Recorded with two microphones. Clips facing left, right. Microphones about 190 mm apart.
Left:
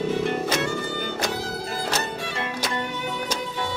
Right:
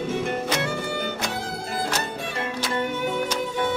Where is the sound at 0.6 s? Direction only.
60° right (ahead or behind).